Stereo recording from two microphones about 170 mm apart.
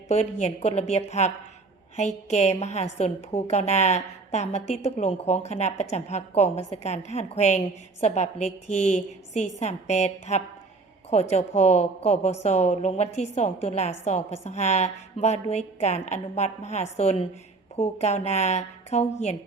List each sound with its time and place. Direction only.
0.1 s a woman's voice: 40° left (ahead or behind)